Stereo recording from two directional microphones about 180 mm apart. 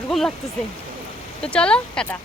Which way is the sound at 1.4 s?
5° left (ahead or behind).